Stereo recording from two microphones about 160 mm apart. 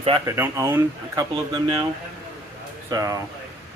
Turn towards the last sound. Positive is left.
turn(degrees=-20)  # may be behind; listen again after turning